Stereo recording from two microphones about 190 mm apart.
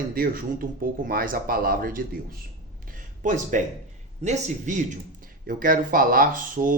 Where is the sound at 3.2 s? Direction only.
40° right (ahead or behind).